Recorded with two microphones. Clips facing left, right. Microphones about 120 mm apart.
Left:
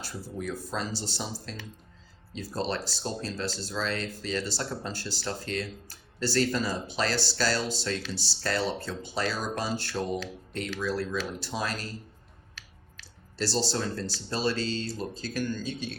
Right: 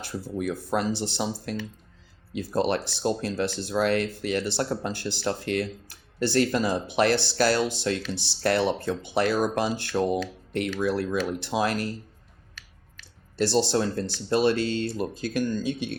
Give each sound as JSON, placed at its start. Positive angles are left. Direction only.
{"t": 0.0, "sound": "speech", "side_deg": -60}
{"t": 13.3, "sound": "speech", "side_deg": -55}